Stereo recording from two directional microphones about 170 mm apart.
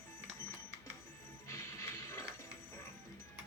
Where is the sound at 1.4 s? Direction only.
20° left (ahead or behind).